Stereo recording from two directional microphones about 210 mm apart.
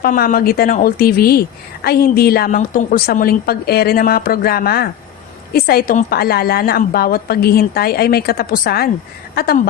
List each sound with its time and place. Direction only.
0.0 s a woman's voice: 40° left (ahead or behind)